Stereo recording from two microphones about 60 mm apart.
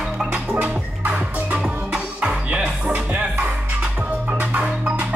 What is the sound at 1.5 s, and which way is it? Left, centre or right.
Music, centre.